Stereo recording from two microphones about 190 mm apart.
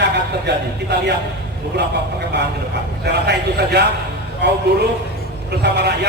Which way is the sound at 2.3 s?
65° right (ahead or behind).